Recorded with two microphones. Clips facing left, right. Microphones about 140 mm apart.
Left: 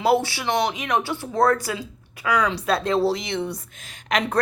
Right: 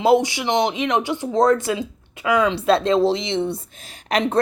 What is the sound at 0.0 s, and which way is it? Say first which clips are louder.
A woman's voice: right 4 dB; 20° right (ahead or behind).